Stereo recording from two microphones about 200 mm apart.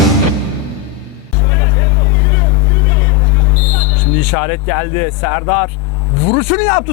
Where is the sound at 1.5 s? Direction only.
20° left (ahead or behind).